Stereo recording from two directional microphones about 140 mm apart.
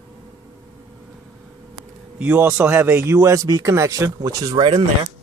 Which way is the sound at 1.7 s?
10° right (ahead or behind).